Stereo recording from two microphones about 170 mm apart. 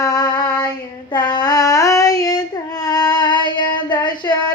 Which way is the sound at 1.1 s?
25° left (ahead or behind).